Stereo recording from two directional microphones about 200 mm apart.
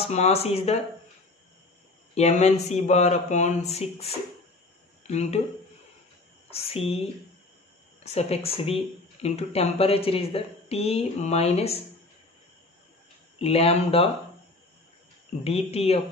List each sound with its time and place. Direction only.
0.0 s speech: 30° left (ahead or behind)
2.1 s speech: 35° left (ahead or behind)
6.5 s speech: 30° left (ahead or behind)
8.0 s speech: 30° left (ahead or behind)
13.4 s speech: 30° left (ahead or behind)
15.4 s speech: 30° left (ahead or behind)